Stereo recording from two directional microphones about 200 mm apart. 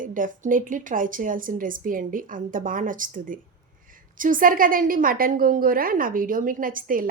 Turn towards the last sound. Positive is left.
turn(degrees=-45)  # may be behind; listen again after turning